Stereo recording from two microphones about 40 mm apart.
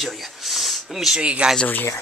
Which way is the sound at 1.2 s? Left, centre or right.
Right.